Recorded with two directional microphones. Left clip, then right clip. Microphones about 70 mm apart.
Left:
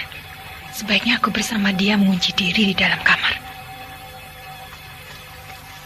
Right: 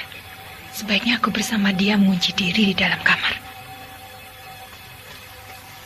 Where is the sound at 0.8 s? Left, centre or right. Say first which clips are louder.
Left 2 dB; right.